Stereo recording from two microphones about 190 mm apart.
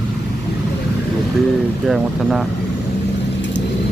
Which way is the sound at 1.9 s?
Centre (ahead or behind).